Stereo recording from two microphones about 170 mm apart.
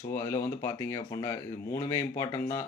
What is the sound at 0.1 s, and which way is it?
A man's voice, 15° left (ahead or behind).